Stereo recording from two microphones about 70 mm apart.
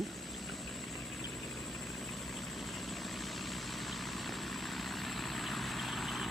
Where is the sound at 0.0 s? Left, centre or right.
Centre.